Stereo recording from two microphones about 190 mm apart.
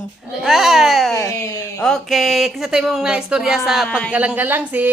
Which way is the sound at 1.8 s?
Centre (ahead or behind).